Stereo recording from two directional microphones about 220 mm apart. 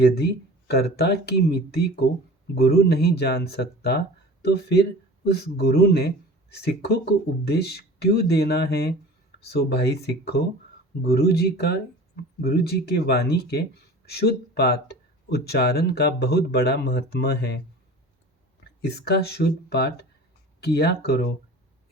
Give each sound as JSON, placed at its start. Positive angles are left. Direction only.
{"t": 0.0, "sound": "speech", "side_deg": 45}
{"t": 18.8, "sound": "speech", "side_deg": 45}